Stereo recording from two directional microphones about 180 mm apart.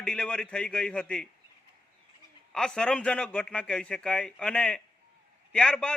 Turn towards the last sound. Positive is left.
turn(degrees=5)  # may be behind; listen again after turning